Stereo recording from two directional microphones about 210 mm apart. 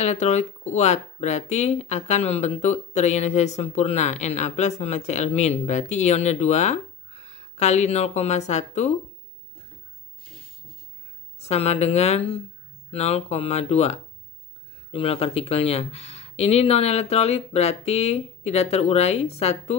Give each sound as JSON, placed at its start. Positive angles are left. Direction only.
{"t": 0.0, "sound": "speech", "side_deg": 35}
{"t": 11.3, "sound": "speech", "side_deg": 30}